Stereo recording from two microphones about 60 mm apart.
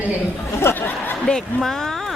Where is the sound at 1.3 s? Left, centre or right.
Centre.